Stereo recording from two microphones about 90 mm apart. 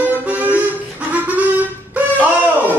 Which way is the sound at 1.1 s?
20° right (ahead or behind).